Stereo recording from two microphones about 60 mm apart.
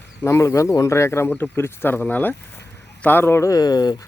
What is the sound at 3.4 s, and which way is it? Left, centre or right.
Speech, left.